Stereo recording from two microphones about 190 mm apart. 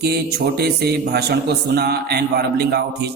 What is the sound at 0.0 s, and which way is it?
A man's voice, 60° right (ahead or behind).